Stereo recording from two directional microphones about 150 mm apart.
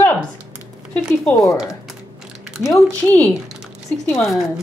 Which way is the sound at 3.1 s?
10° left (ahead or behind).